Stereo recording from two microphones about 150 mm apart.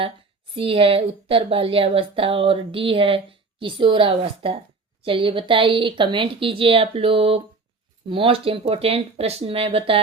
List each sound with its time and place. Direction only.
0.5 s speech: 40° right (ahead or behind)